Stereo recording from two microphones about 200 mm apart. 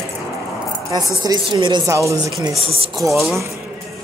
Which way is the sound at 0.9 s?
20° right (ahead or behind).